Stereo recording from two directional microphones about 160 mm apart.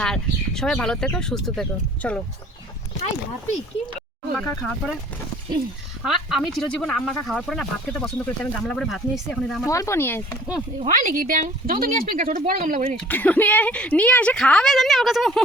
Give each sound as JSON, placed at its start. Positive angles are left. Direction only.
{"t": 0.0, "sound": "speech", "side_deg": 5}
{"t": 4.4, "sound": "speech", "side_deg": 0}
{"t": 6.1, "sound": "speech", "side_deg": 0}
{"t": 9.6, "sound": "speech", "side_deg": 20}
{"t": 10.8, "sound": "speech", "side_deg": -55}
{"t": 13.1, "sound": "speech", "side_deg": 10}